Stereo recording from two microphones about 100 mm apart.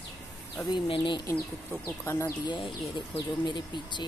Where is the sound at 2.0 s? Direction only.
30° left (ahead or behind).